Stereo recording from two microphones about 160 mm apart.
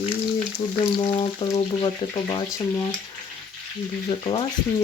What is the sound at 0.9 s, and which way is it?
Speech, 30° left (ahead or behind).